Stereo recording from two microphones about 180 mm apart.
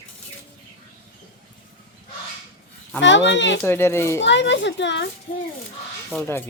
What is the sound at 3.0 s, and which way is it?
Speech, 85° left.